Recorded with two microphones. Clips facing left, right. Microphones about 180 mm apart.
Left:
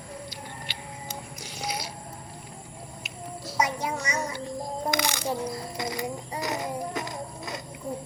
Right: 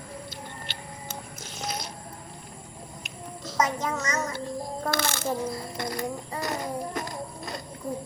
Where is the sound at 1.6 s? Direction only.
10° left (ahead or behind).